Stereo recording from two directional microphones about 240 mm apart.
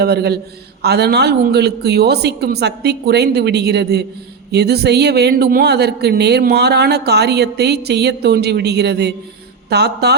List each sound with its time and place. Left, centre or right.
0.0 s a man's voice: right